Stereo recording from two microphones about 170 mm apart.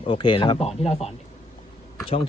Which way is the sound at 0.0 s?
30° left (ahead or behind).